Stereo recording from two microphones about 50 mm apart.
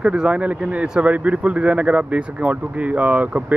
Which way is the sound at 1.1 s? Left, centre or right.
Right.